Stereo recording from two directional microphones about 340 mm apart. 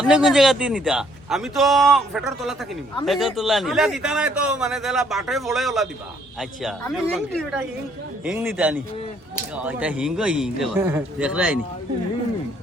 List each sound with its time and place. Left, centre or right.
0.0 s a man's voice: centre